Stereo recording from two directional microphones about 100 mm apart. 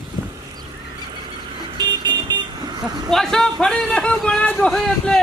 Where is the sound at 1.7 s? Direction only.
50° right (ahead or behind).